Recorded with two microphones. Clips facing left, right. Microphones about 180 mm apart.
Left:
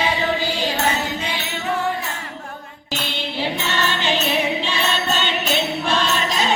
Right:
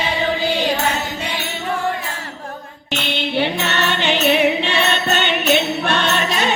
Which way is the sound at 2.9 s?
70° right (ahead or behind).